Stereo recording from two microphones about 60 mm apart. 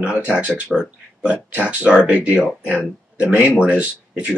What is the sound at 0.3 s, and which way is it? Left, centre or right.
Speech, right.